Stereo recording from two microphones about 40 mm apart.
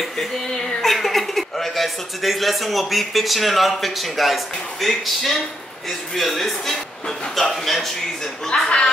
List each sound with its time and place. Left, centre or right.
0.2 s speech: centre
8.5 s speech: left